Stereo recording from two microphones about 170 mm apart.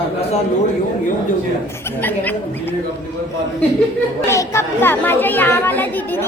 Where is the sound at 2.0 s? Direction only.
10° left (ahead or behind).